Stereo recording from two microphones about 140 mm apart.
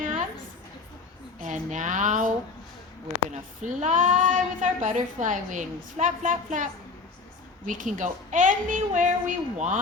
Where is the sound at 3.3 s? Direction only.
60° right (ahead or behind).